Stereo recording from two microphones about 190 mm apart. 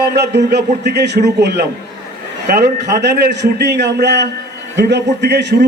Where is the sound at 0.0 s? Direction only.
60° right (ahead or behind).